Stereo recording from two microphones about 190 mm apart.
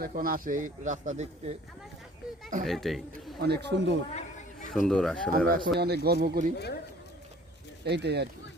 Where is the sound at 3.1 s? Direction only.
60° right (ahead or behind).